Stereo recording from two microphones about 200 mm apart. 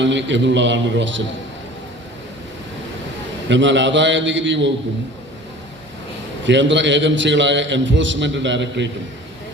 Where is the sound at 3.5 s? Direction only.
65° right (ahead or behind).